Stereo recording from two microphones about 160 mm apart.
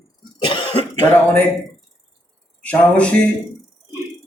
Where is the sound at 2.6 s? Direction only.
10° left (ahead or behind).